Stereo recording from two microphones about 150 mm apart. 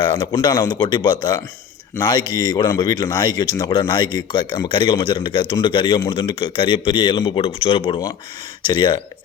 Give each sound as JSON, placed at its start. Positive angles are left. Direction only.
{"t": 0.0, "sound": "a man's voice", "side_deg": 30}